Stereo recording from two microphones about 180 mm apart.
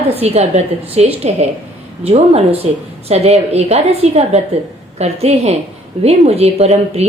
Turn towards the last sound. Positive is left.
turn(degrees=-35)  # may be behind; listen again after turning